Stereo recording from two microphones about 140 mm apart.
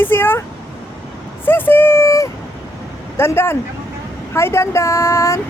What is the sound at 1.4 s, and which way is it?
Speech, 15° left (ahead or behind).